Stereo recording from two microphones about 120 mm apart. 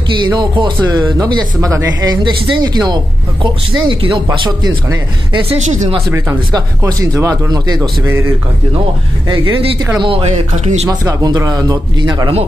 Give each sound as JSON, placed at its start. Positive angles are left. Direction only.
{"t": 0.1, "sound": "speech", "side_deg": -40}
{"t": 5.6, "sound": "speech", "side_deg": -80}
{"t": 6.8, "sound": "speech", "side_deg": -25}
{"t": 8.0, "sound": "a man's voice", "side_deg": -25}
{"t": 9.3, "sound": "speech", "side_deg": -45}
{"t": 10.5, "sound": "speech", "side_deg": -70}
{"t": 10.9, "sound": "speech", "side_deg": -35}